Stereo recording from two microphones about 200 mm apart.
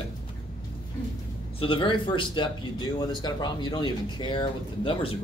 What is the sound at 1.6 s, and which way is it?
Speech, 25° left (ahead or behind).